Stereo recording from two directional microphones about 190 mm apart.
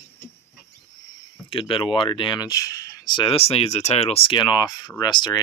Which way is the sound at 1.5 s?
30° left (ahead or behind).